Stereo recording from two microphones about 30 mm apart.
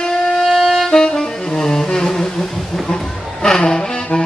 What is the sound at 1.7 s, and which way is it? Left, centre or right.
Music, left.